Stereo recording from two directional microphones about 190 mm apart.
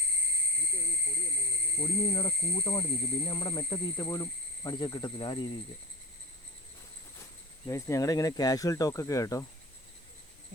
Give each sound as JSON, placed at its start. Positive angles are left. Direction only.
{"t": 1.8, "sound": "speech", "side_deg": 25}
{"t": 7.7, "sound": "speech", "side_deg": 15}